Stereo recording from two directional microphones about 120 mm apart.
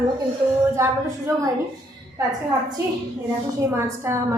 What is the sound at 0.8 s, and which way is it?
Speech, 25° right (ahead or behind).